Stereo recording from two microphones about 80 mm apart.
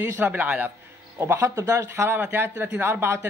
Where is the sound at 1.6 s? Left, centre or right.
Right.